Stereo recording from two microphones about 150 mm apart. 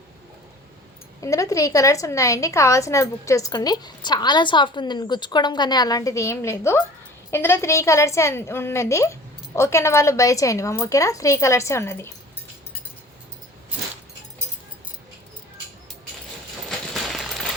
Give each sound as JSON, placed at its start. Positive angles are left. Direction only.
{"t": 1.2, "sound": "a woman's voice", "side_deg": 20}
{"t": 16.6, "sound": "coin", "side_deg": 0}